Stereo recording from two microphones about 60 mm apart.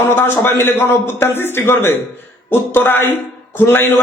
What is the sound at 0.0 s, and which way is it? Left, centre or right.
A woman's voice, left.